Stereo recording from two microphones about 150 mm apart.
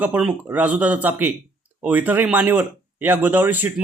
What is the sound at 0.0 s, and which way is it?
Speech, 10° right (ahead or behind).